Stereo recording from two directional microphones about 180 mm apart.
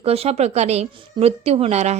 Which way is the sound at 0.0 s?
35° right (ahead or behind).